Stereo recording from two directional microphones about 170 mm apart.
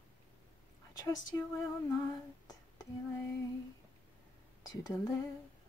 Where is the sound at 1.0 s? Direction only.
20° left (ahead or behind).